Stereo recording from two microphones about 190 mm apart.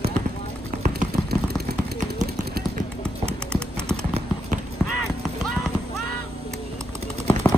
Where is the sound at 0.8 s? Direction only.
50° right (ahead or behind).